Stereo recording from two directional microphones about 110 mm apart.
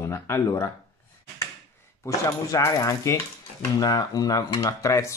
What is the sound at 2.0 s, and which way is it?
Speech, 30° left (ahead or behind).